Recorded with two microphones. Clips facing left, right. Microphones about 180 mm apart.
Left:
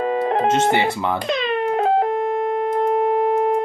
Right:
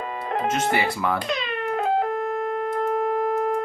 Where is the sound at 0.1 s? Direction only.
25° left (ahead or behind).